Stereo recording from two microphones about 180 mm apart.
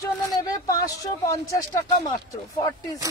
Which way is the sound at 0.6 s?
20° left (ahead or behind).